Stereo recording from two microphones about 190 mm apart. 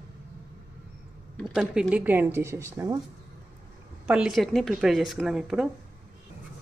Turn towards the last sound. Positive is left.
turn(degrees=-5)  # may be behind; listen again after turning